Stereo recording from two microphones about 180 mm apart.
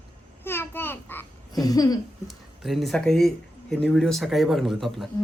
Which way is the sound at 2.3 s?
Centre (ahead or behind).